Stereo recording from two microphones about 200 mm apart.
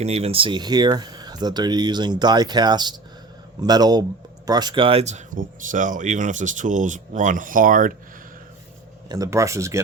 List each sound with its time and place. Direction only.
0.0 s speech: 30° right (ahead or behind)
9.0 s speech: 15° right (ahead or behind)